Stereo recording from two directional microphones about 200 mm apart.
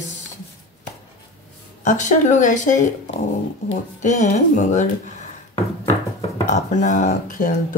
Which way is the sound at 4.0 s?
40° left (ahead or behind).